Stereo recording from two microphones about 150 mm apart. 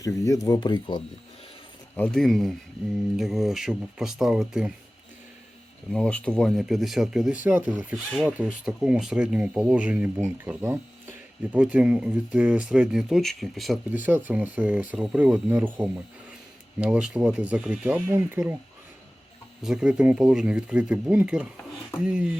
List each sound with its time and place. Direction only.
0.0 s speech: 20° left (ahead or behind)
2.0 s speech: centre (ahead or behind)
5.9 s speech: 5° left (ahead or behind)
13.9 s speech: 10° right (ahead or behind)
19.6 s speech: 5° right (ahead or behind)